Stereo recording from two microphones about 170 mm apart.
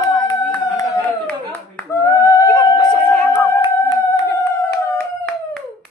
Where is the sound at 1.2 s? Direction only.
5° left (ahead or behind).